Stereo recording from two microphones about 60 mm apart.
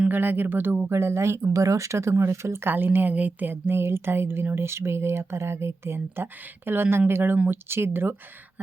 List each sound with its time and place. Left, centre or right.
0.1 s a woman's voice: right
0.9 s speech: right
1.5 s speech: right
2.6 s a woman's voice: right
3.5 s a woman's voice: right